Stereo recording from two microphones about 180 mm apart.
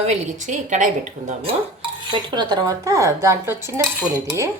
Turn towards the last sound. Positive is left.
turn(degrees=-15)  # may be behind; listen again after turning